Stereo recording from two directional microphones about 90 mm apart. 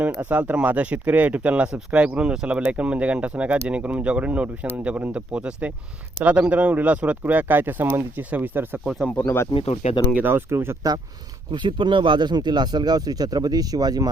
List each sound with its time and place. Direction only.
0.0 s speech: 15° right (ahead or behind)
8.8 s speech: centre (ahead or behind)
9.0 s speech: 25° left (ahead or behind)
9.5 s speech: 70° left (ahead or behind)
10.2 s speech: 25° right (ahead or behind)
11.5 s speech: 60° right (ahead or behind); by 14.1 s 45° right (ahead or behind)